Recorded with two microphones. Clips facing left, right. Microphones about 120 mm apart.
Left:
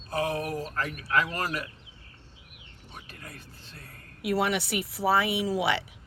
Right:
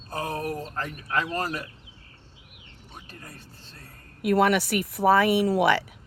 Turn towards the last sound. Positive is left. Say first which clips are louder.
# right 6 dB
turn(degrees=-55)  # may be behind; listen again after turning